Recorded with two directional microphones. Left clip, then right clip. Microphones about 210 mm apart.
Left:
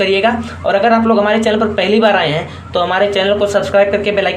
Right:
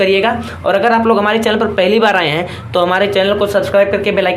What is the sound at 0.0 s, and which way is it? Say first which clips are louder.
Speech: right 1 dB; 10° right (ahead or behind).